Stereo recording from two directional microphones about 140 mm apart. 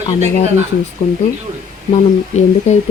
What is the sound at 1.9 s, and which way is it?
Speech, 55° left (ahead or behind).